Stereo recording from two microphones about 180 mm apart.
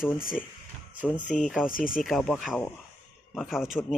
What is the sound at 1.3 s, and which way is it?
Speech, 45° left (ahead or behind).